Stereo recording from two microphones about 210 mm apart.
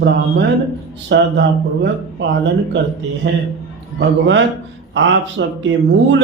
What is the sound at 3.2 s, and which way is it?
Speech, 55° right (ahead or behind).